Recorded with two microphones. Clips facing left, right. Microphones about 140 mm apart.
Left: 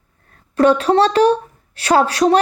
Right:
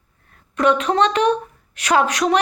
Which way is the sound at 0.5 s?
35° left (ahead or behind).